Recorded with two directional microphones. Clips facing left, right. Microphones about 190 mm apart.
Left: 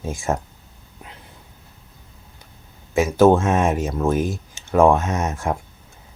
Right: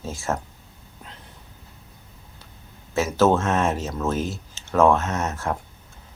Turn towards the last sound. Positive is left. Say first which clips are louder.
# left 3 dB
turn(degrees=15)  # may be behind; listen again after turning